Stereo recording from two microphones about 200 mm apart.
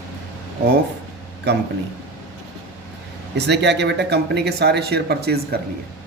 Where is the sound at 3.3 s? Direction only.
60° right (ahead or behind).